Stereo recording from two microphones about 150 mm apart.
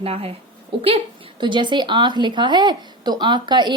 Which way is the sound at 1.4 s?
30° right (ahead or behind).